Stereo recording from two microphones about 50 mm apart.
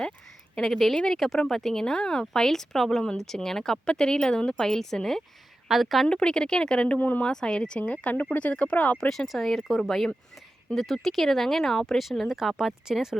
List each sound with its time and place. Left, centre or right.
0.5 s speech: centre
5.6 s speech: centre
6.1 s speech: centre
9.0 s speech: centre